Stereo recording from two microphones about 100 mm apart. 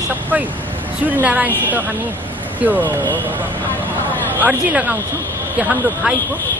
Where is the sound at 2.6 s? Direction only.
15° right (ahead or behind).